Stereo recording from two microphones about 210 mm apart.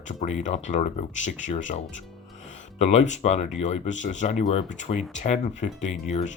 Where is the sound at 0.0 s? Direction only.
35° left (ahead or behind).